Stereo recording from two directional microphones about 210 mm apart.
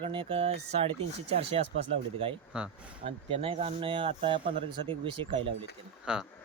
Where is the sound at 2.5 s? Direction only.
5° right (ahead or behind).